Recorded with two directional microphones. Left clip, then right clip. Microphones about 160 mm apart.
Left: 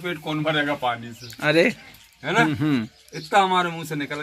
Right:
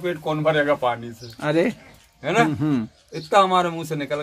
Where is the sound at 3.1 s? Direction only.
45° right (ahead or behind).